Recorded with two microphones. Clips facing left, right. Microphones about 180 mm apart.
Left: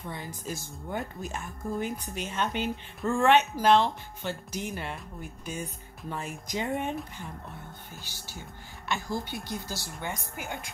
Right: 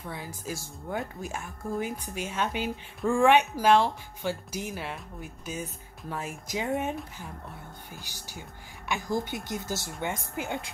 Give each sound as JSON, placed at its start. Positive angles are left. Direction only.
{"t": 0.0, "sound": "a woman's voice", "side_deg": -5}